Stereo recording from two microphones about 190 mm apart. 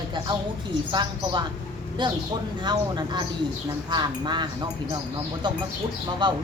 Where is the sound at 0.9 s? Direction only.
25° right (ahead or behind).